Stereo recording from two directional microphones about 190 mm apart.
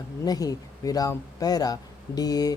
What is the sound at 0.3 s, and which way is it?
Speech, 20° left (ahead or behind).